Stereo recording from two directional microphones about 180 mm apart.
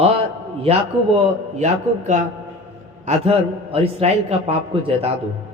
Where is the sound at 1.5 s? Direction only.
40° right (ahead or behind).